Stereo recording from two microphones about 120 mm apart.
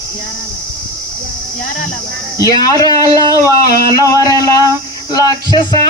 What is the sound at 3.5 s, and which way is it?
Speech, 30° left (ahead or behind).